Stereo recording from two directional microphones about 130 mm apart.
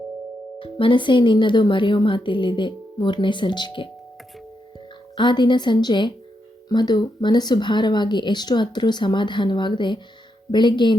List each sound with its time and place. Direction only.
0.6 s speech: 40° left (ahead or behind)
5.1 s speech: 35° left (ahead or behind)